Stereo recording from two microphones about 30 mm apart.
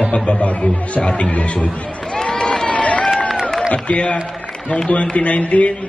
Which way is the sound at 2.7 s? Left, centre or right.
Left.